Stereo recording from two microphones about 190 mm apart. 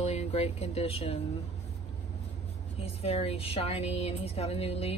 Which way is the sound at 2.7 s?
30° left (ahead or behind).